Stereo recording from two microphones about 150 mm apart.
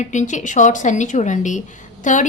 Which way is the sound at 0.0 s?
55° left (ahead or behind).